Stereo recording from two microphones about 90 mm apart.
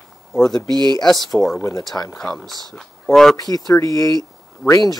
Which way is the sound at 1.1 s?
50° left (ahead or behind).